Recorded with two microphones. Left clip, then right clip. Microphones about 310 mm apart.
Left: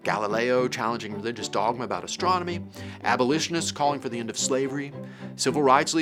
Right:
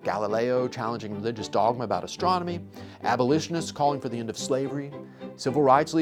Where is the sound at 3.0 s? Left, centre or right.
Right.